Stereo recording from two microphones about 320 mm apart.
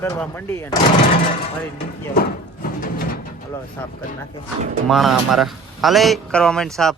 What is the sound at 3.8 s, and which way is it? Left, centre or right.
A man's voice, centre.